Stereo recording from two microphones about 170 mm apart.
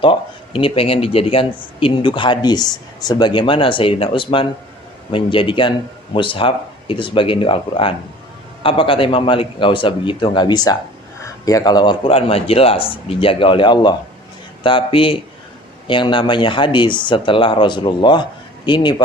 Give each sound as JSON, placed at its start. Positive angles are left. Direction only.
{"t": 0.0, "sound": "speech", "side_deg": 30}